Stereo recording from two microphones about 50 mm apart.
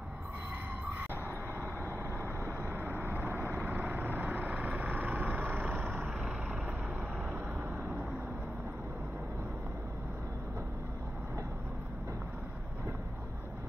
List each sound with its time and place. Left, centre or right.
1.9 s vehicle: right
2.8 s vehicle: right